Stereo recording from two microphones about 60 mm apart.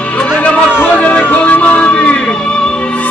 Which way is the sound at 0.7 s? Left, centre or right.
Left.